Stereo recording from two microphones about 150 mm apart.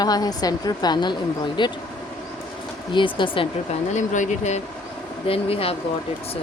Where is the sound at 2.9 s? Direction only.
35° left (ahead or behind).